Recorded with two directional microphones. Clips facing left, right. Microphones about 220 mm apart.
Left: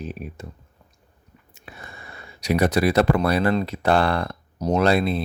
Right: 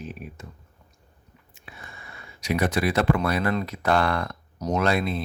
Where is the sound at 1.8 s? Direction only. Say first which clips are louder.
Left 3 dB; 35° left (ahead or behind).